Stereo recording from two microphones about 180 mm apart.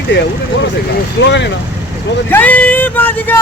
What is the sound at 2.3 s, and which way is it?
Speech, 10° left (ahead or behind).